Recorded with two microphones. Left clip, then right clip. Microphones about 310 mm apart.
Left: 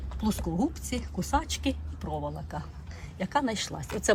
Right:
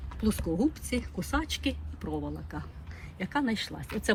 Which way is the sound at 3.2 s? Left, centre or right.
Left.